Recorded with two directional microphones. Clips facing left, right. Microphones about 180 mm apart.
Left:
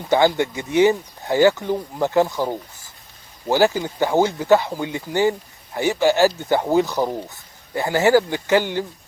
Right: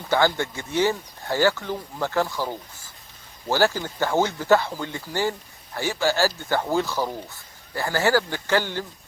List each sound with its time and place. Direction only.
0.1 s speech: 20° left (ahead or behind)